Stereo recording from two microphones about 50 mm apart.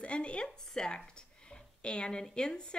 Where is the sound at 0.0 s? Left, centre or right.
Left.